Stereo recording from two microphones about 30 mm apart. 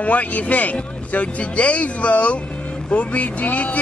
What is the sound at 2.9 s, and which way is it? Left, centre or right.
Speech, left.